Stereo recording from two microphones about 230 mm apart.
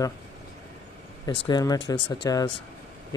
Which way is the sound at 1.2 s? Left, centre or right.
Left.